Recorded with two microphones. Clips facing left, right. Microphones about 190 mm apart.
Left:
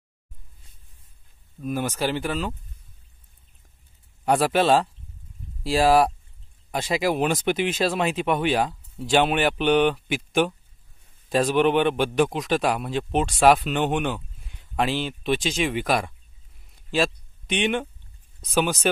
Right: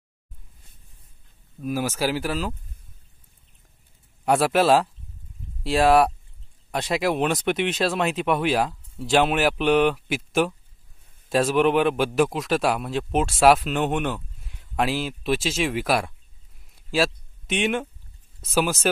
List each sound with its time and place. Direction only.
1.6 s speech: 5° right (ahead or behind)
4.2 s speech: centre (ahead or behind)
16.7 s a sound: 5° right (ahead or behind)
18.4 s speech: 5° right (ahead or behind)